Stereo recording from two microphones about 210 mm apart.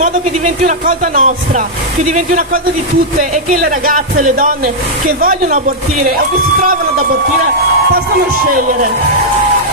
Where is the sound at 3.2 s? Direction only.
40° right (ahead or behind).